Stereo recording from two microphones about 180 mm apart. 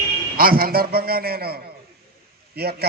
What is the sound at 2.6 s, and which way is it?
Speech, 60° right (ahead or behind).